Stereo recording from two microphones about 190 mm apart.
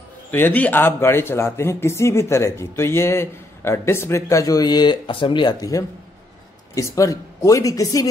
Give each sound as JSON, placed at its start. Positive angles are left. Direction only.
{"t": 0.3, "sound": "a man's voice", "side_deg": 10}